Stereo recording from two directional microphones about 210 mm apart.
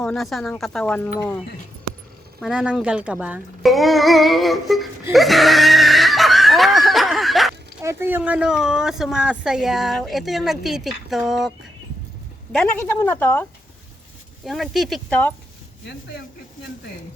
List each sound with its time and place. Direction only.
0.0 s speech: centre (ahead or behind)
2.4 s speech: 5° right (ahead or behind)
5.1 s snicker: centre (ahead or behind)
7.8 s a woman's voice: 10° right (ahead or behind)